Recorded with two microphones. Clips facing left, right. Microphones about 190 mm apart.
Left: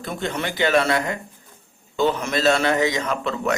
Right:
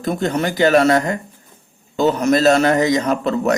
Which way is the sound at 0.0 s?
40° right (ahead or behind).